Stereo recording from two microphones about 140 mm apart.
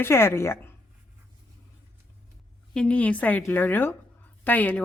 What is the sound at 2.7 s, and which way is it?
Speech, 10° left (ahead or behind).